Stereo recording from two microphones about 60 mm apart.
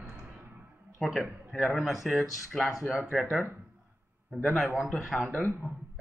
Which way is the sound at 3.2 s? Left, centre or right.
Centre.